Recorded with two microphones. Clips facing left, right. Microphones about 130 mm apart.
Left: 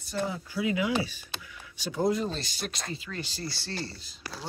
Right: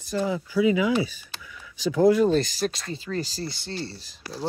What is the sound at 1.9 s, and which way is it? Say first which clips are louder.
Speech: right 9 dB; 85° right.